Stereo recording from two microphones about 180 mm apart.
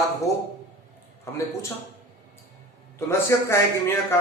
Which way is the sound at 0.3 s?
20° left (ahead or behind).